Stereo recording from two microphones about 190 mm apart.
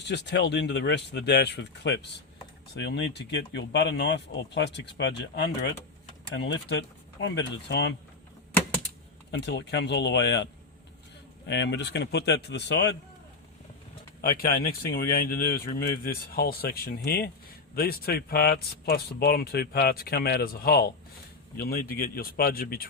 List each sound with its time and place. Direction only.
0.0 s speech: 65° left (ahead or behind)
9.4 s speech: 60° left (ahead or behind)
14.2 s speech: 50° left (ahead or behind)